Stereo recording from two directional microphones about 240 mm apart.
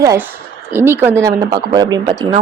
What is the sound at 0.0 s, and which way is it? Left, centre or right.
Speech, centre.